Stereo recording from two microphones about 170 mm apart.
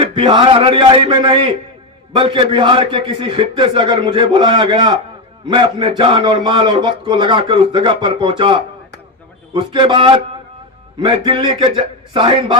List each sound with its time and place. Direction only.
0.0 s a man's voice: 30° right (ahead or behind)